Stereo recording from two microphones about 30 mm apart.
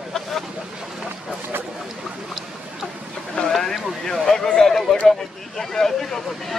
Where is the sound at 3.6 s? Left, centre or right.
Centre.